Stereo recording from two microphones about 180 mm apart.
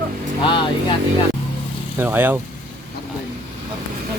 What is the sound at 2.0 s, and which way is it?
Speech, 10° right (ahead or behind).